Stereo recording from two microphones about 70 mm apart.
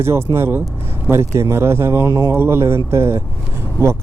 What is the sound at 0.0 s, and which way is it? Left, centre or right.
Speech, right.